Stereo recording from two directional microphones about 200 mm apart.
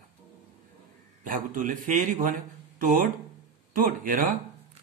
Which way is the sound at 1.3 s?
45° right (ahead or behind).